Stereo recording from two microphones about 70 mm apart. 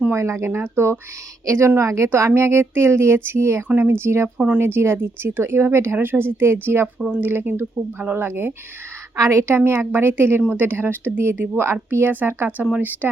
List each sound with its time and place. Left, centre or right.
0.1 s a woman's voice: right
4.4 s speech: right
4.6 s speech: right
6.8 s speech: centre
7.2 s speech: right
9.1 s speech: right